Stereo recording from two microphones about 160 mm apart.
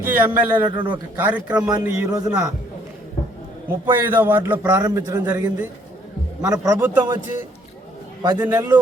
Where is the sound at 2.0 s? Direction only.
20° right (ahead or behind).